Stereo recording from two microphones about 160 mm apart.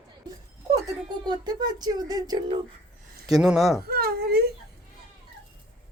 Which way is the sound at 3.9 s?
75° right (ahead or behind).